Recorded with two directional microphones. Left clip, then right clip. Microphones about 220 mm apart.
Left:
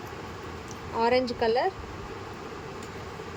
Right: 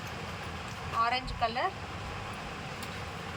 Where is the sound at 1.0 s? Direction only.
35° left (ahead or behind).